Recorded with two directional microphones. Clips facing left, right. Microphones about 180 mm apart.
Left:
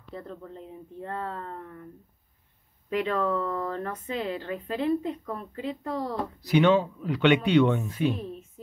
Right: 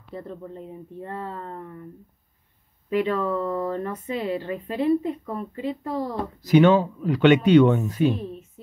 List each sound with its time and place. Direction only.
1.0 s speech: 5° right (ahead or behind)
2.9 s speech: 5° right (ahead or behind)
6.4 s speech: 45° right (ahead or behind)